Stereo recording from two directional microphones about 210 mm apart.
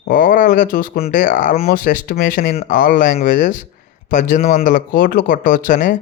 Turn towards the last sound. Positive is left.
turn(degrees=40)  # may be behind; listen again after turning